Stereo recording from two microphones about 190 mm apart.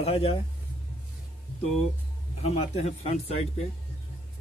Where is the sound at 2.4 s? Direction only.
35° left (ahead or behind).